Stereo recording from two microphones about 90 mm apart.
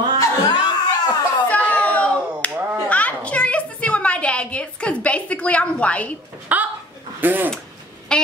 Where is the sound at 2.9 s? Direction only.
15° left (ahead or behind).